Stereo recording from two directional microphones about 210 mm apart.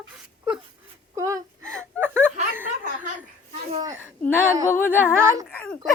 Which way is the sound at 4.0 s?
10° left (ahead or behind).